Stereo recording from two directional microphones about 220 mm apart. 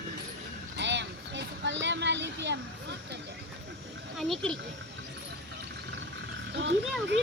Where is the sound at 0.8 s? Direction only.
55° right (ahead or behind).